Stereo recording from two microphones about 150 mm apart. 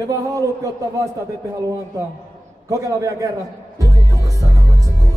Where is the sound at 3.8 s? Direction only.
20° right (ahead or behind).